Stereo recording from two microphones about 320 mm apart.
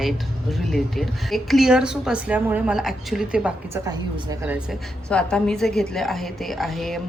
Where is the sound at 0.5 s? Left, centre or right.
Centre.